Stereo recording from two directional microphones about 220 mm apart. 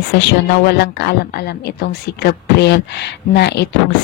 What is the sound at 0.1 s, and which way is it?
Speech, 50° left (ahead or behind).